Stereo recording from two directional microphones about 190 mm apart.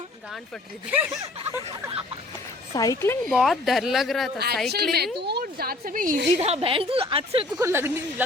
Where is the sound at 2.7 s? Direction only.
15° left (ahead or behind).